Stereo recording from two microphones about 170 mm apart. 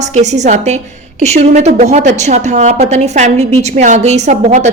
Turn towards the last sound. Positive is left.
turn(degrees=-45)  # may be behind; listen again after turning